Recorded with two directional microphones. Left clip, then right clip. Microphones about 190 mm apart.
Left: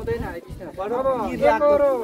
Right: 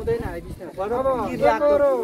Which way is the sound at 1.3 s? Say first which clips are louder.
Left 1 dB; 15° left (ahead or behind).